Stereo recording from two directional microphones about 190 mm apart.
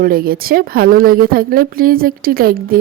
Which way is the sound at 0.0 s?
50° right (ahead or behind).